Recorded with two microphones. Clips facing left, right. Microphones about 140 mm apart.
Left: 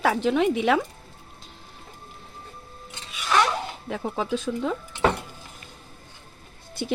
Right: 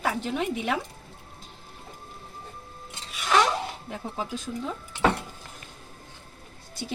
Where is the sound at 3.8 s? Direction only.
90° left.